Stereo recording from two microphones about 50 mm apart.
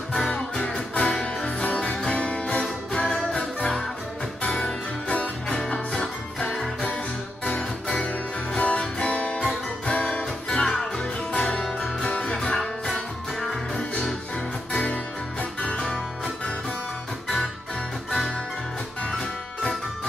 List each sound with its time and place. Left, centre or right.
0.1 s music: centre
8.1 s music: left
12.5 s music: centre
13.7 s music: centre